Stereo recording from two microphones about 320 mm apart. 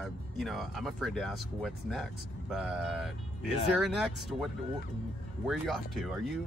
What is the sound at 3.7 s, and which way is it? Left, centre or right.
Speech, centre.